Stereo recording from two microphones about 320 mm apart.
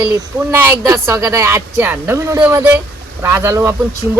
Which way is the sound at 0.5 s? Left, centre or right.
Centre.